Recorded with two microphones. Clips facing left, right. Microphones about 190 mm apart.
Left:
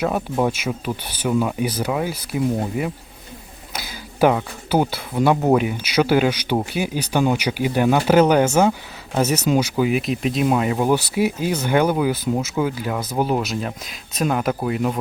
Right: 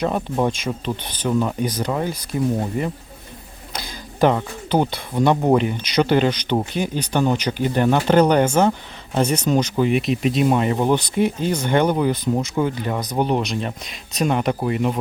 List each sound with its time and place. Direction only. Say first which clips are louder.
0.0 s speech: even; 5° left (ahead or behind)